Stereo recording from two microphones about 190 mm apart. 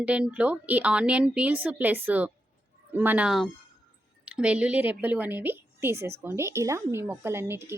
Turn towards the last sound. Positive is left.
turn(degrees=-15)  # may be behind; listen again after turning